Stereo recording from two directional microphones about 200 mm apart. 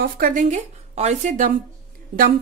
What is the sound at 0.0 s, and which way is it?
A woman's voice, 45° right (ahead or behind).